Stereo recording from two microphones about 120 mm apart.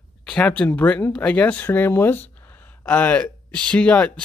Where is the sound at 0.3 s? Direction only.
10° left (ahead or behind).